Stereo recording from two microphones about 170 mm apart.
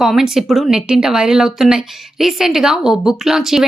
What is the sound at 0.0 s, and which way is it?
Speech, centre (ahead or behind).